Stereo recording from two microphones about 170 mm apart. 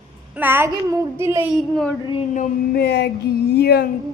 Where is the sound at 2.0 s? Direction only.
30° left (ahead or behind).